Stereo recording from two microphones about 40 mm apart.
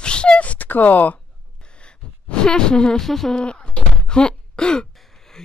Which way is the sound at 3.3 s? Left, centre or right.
Left.